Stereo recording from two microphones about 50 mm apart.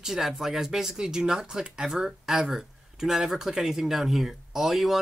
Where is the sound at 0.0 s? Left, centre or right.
Centre.